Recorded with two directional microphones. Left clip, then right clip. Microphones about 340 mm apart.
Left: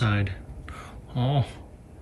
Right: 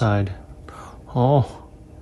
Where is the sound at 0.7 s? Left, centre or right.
Centre.